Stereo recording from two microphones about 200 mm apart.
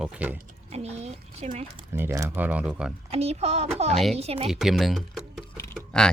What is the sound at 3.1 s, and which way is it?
Speech, 30° right (ahead or behind).